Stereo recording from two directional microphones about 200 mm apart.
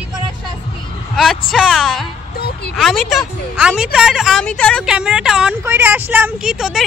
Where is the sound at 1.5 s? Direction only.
Centre (ahead or behind).